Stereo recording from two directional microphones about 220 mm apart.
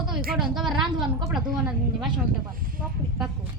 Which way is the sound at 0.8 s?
Centre (ahead or behind).